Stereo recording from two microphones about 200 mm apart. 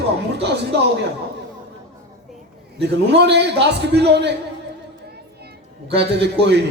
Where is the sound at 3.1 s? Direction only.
55° right (ahead or behind).